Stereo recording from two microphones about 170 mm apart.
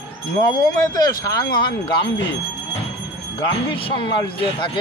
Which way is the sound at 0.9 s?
20° left (ahead or behind).